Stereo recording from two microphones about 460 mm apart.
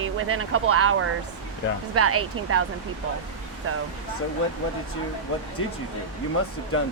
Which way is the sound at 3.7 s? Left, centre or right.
Right.